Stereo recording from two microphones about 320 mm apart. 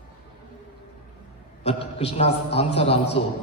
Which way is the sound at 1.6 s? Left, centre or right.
Centre.